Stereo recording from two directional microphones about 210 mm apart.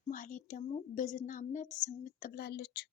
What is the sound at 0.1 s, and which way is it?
A woman's voice, 40° left (ahead or behind).